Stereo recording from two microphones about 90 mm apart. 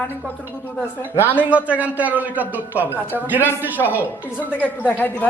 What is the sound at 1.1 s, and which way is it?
Speech, 25° left (ahead or behind).